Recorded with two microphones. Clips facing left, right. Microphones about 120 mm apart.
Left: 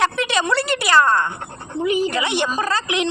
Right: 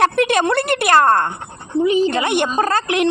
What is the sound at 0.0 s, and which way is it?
A woman's voice, 55° right (ahead or behind).